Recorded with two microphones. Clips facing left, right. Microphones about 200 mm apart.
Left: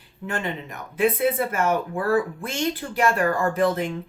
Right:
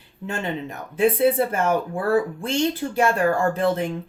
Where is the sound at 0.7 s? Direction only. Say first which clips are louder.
Right 2 dB; 30° right (ahead or behind).